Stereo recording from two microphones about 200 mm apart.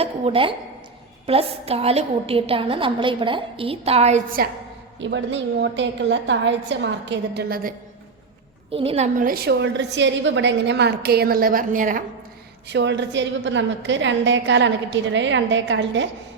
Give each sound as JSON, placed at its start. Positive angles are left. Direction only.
{"t": 0.0, "sound": "a woman's voice", "side_deg": -25}
{"t": 4.9, "sound": "a woman's voice", "side_deg": -65}
{"t": 8.7, "sound": "a woman's voice", "side_deg": -30}
{"t": 9.1, "sound": "a woman's voice", "side_deg": -45}
{"t": 12.6, "sound": "a woman's voice", "side_deg": -60}